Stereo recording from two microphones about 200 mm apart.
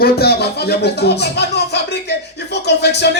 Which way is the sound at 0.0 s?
50° left (ahead or behind).